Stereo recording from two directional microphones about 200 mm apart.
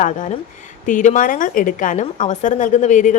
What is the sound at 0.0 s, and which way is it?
A woman's voice, 40° left (ahead or behind).